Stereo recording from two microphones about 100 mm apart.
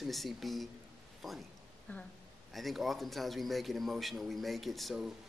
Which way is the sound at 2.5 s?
Centre (ahead or behind).